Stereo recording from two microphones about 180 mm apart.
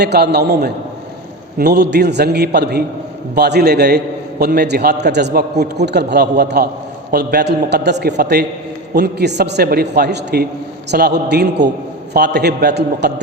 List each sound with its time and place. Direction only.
0.0 s a man's voice: 65° right (ahead or behind)